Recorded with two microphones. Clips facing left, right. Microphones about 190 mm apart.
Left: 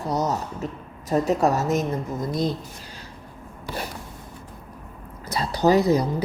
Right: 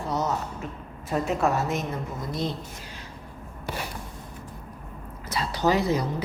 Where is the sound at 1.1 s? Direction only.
40° left (ahead or behind).